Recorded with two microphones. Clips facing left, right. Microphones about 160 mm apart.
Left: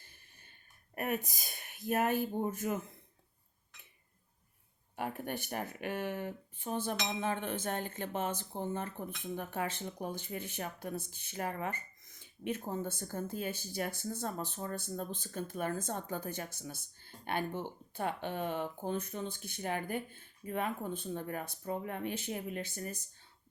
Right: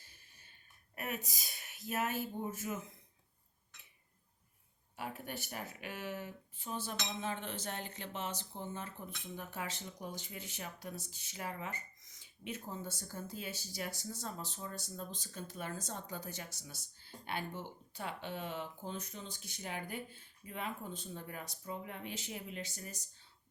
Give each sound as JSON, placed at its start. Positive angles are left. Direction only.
{"t": 0.9, "sound": "speech", "side_deg": 55}
{"t": 4.9, "sound": "speech", "side_deg": 50}